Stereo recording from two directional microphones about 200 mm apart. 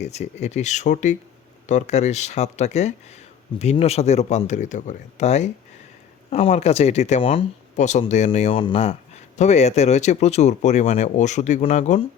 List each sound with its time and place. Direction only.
0.0 s speech: 35° left (ahead or behind)